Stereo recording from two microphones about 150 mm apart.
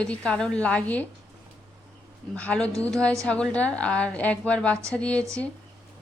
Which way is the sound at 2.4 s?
10° left (ahead or behind).